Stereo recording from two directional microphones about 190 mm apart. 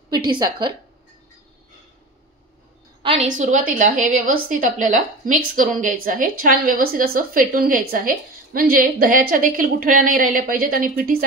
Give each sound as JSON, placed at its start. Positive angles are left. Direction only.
{"t": 0.3, "sound": "a woman's voice", "side_deg": -25}
{"t": 3.0, "sound": "a sound", "side_deg": -30}
{"t": 3.3, "sound": "a woman's voice", "side_deg": -40}